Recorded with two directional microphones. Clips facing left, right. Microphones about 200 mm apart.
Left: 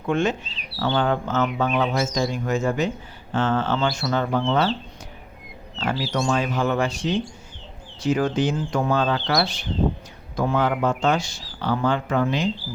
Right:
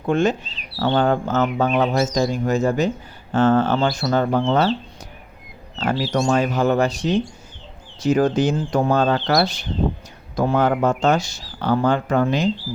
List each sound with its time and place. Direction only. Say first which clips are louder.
0.0 s speech: right 3 dB; 35° right (ahead or behind)
5.7 s bird: right 4 dB; 40° right (ahead or behind)
6.1 s speech: right 4 dB; 45° right (ahead or behind)